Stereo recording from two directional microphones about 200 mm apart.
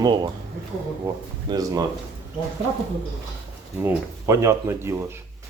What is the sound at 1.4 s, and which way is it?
Speech, 20° right (ahead or behind).